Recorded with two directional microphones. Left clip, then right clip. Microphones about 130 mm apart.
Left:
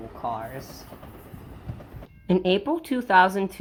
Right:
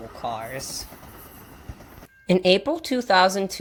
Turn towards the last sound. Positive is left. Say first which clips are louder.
# even
turn(degrees=-40)  # may be behind; listen again after turning